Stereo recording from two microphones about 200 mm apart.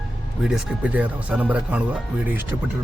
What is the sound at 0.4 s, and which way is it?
Speech, 5° right (ahead or behind).